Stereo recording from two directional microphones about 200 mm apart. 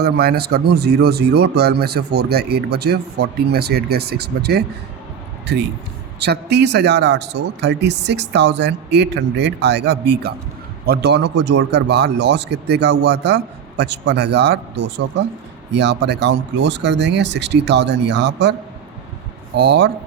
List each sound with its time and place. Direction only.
0.0 s speech: 50° right (ahead or behind)
19.5 s speech: 60° right (ahead or behind)